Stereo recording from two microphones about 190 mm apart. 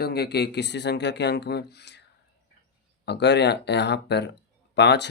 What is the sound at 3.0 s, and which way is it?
Speech, 65° left (ahead or behind).